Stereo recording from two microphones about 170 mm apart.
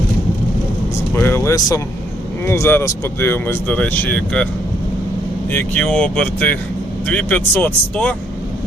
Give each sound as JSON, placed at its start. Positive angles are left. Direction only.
{"t": 1.1, "sound": "speech", "side_deg": 15}
{"t": 5.5, "sound": "speech", "side_deg": 10}